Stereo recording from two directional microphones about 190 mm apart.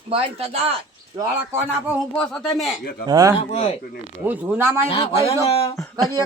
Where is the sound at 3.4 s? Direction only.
35° left (ahead or behind).